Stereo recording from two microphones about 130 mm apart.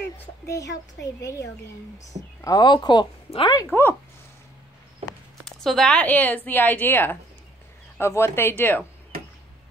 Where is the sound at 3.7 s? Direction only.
15° left (ahead or behind).